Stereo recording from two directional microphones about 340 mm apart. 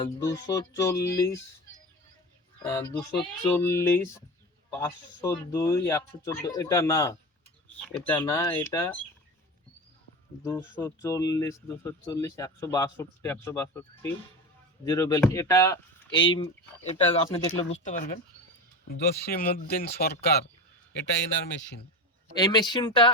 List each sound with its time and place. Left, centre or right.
0.0 s speech: centre
2.6 s speech: centre
5.2 s speech: centre
10.4 s speech: centre
17.7 s speech: left
22.4 s speech: centre